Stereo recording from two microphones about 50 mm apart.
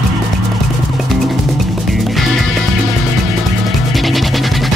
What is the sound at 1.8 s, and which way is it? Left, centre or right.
Music, centre.